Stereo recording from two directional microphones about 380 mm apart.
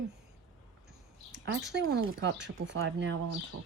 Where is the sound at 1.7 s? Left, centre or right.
Right.